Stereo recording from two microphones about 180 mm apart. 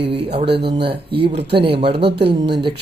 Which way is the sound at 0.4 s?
70° right (ahead or behind).